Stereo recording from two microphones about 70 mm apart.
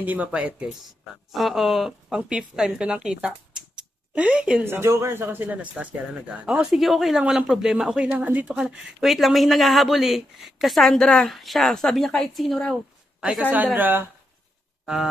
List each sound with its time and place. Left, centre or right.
0.0 s speech: right
1.3 s a woman's voice: centre
4.6 s a man's voice: right
6.4 s speech: centre
8.2 s speech: right
8.5 s speech: centre
13.2 s speech: centre